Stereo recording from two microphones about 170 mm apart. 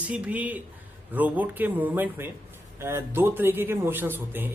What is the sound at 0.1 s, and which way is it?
Speech, 10° right (ahead or behind).